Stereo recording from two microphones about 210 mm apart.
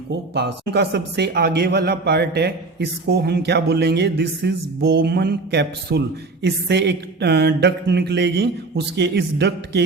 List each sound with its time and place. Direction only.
0.1 s speech: 55° right (ahead or behind)